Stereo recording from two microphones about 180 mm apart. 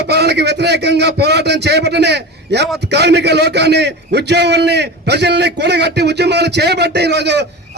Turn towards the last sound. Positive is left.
turn(degrees=-70)  # may be behind; listen again after turning